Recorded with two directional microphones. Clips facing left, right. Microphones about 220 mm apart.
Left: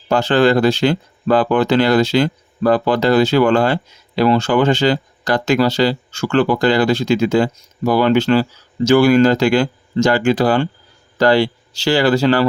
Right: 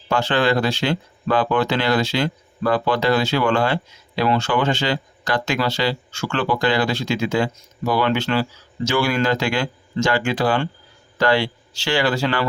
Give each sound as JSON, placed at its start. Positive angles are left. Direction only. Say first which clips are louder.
{"t": 0.1, "sound": "speech", "louder": "left 6 dB", "side_deg": 40}